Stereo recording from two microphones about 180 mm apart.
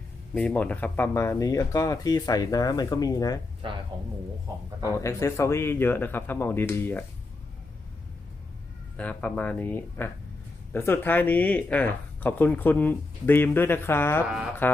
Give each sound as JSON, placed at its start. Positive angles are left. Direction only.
{"t": 0.3, "sound": "speech", "side_deg": 5}
{"t": 3.6, "sound": "speech", "side_deg": -30}
{"t": 4.9, "sound": "speech", "side_deg": 15}
{"t": 9.0, "sound": "speech", "side_deg": 10}